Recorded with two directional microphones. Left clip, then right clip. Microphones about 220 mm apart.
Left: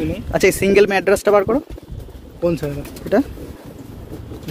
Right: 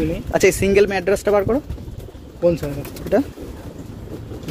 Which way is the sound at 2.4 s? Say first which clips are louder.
Right 2 dB; 50° left (ahead or behind).